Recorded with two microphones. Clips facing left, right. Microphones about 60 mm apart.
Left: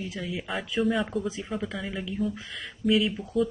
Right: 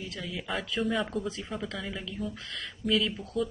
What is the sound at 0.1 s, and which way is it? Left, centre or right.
Speech, centre.